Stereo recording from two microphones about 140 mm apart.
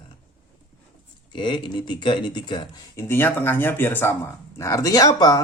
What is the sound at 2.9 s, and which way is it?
Speech, 15° left (ahead or behind).